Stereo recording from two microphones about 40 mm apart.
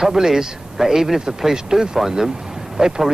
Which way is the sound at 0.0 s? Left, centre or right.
Centre.